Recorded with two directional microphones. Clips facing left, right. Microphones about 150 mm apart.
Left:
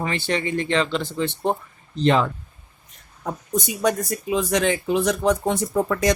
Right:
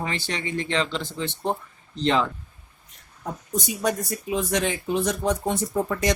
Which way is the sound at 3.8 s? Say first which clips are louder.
Left 4 dB; 90° left.